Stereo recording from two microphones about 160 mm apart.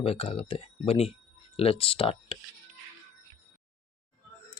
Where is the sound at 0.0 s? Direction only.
35° left (ahead or behind).